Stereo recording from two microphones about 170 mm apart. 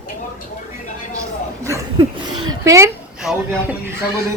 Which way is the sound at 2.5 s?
20° right (ahead or behind).